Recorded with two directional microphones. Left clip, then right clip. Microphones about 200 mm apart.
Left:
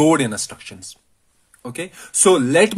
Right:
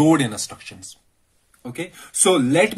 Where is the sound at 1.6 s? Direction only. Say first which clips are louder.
Left 2 dB; 50° left (ahead or behind).